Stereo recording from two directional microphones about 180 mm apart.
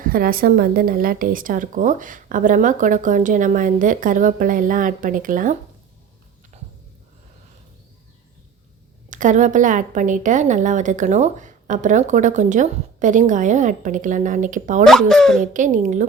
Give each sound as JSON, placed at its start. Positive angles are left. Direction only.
{"t": 0.0, "sound": "a woman's voice", "side_deg": -55}
{"t": 9.0, "sound": "a woman's voice", "side_deg": -45}
{"t": 14.8, "sound": "speech", "side_deg": 0}
{"t": 15.5, "sound": "a woman's voice", "side_deg": -45}